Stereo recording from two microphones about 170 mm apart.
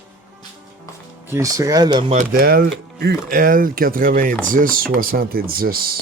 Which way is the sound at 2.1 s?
50° right (ahead or behind).